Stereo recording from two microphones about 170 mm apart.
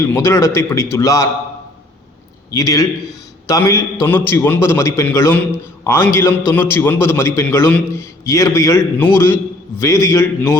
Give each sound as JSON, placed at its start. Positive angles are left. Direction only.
{"t": 0.0, "sound": "a man's voice", "side_deg": 15}
{"t": 2.5, "sound": "a man's voice", "side_deg": 20}